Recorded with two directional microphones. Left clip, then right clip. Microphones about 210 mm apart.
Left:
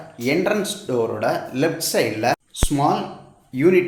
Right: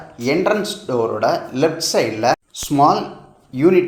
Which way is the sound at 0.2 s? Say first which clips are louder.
Right 3 dB; 5° right (ahead or behind).